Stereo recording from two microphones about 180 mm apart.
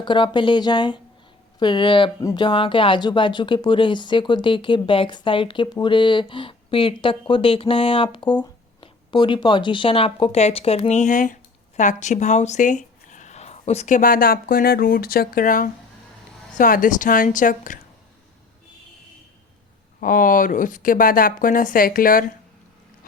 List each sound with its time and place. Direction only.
0.0 s speech: 25° left (ahead or behind); by 17.7 s 50° left (ahead or behind)
20.0 s speech: 50° left (ahead or behind)